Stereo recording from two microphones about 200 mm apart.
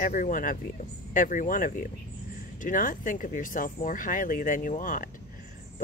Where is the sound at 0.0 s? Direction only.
40° left (ahead or behind).